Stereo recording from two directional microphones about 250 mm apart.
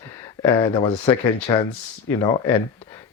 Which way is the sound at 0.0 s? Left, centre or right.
Centre.